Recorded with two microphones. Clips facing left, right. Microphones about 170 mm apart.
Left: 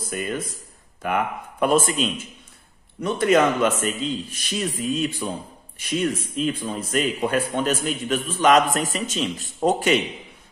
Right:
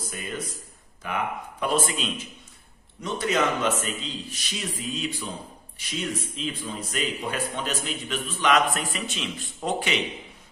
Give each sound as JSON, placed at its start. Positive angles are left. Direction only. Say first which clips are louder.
{"t": 0.1, "sound": "a man's voice", "louder": "left 8 dB", "side_deg": 55}